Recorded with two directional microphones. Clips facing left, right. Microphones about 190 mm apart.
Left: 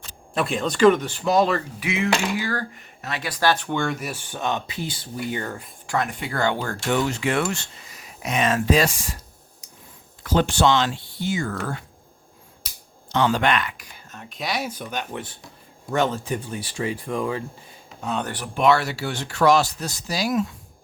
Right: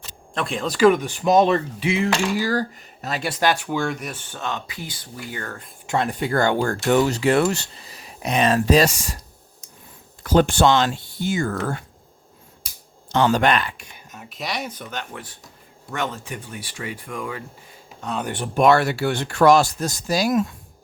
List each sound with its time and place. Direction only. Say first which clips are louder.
0.3 s speech: left 1 dB; centre (ahead or behind); by 3.1 s 35° right (ahead or behind)
3.2 s speech: right 1 dB; 25° right (ahead or behind)
3.5 s speech: even; 5° right (ahead or behind); by 5.6 s 15° left (ahead or behind)
5.8 s a sound: right 2 dB; 20° right (ahead or behind)
6.1 s speech: right 4 dB; 40° right (ahead or behind)
10.2 s speech: right 3 dB; 50° right (ahead or behind)
13.1 s speech: right 2 dB; 45° right (ahead or behind); by 14.0 s 25° right (ahead or behind)
14.1 s speech: left 1 dB; 5° right (ahead or behind); by 15.2 s 15° left (ahead or behind)
15.9 s speech: left 6 dB; 30° left (ahead or behind)
18.0 s speech: left 1 dB; centre (ahead or behind)
18.5 s speech: right 3 dB; 50° right (ahead or behind)